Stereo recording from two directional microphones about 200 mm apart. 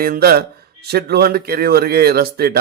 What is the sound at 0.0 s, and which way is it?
A man's voice, 50° right (ahead or behind).